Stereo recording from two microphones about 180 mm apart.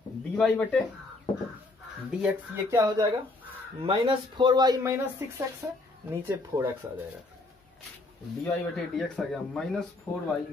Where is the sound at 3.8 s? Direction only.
30° right (ahead or behind).